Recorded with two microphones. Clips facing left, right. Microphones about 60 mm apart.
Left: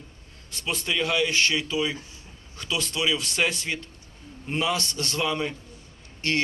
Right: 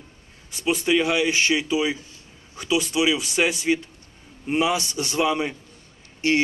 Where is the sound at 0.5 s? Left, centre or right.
Centre.